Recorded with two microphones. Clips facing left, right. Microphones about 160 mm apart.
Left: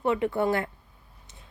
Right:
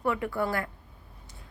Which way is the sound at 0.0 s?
25° left (ahead or behind).